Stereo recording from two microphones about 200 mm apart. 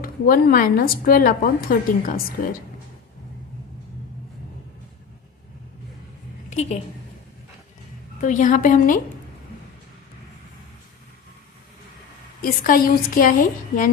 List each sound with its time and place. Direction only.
0.0 s speech: 45° left (ahead or behind)
6.5 s a woman's voice: 35° left (ahead or behind)
8.2 s a woman's voice: 40° left (ahead or behind)
12.4 s speech: 45° left (ahead or behind)